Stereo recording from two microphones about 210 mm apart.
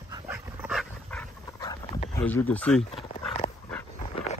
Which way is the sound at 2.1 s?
10° left (ahead or behind).